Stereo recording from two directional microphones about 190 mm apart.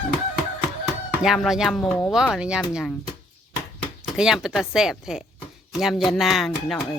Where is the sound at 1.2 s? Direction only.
Centre (ahead or behind).